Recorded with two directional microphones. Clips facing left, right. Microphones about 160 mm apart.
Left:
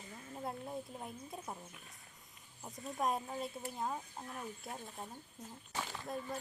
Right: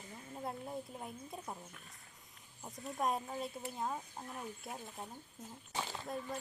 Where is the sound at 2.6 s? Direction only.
Centre (ahead or behind).